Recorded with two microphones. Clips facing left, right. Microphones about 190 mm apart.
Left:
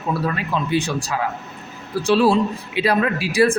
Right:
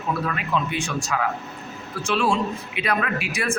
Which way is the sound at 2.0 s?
35° left (ahead or behind).